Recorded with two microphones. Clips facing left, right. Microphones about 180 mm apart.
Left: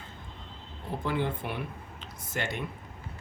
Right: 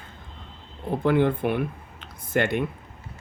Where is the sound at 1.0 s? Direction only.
55° right (ahead or behind).